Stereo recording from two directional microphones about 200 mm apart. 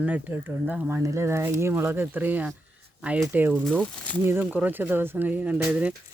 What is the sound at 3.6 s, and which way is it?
Speech, 5° left (ahead or behind).